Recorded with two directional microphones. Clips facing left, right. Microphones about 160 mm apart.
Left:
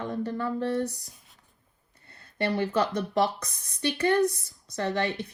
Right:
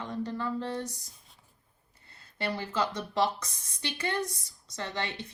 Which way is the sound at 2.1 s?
60° left (ahead or behind).